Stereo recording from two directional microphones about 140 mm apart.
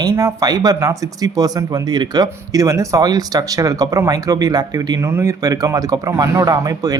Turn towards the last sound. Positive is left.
turn(degrees=-25)  # may be behind; listen again after turning